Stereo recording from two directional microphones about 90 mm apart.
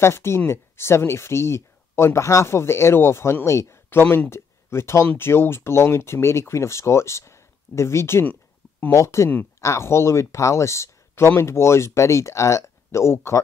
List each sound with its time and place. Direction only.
0.0 s speech: 30° left (ahead or behind)